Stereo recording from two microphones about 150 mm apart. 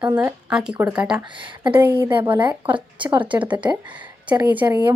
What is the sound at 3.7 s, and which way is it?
Speech, 30° right (ahead or behind).